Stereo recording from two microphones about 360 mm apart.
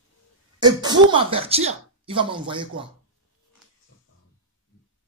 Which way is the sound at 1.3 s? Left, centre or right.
Centre.